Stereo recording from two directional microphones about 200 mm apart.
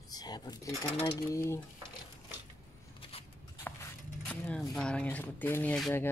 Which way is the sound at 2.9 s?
30° left (ahead or behind).